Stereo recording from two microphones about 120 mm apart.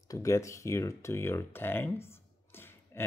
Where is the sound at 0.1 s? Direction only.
25° left (ahead or behind).